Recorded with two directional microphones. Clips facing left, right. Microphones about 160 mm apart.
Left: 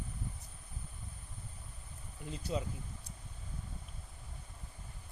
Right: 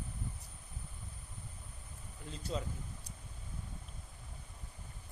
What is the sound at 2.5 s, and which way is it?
Speech, 10° left (ahead or behind).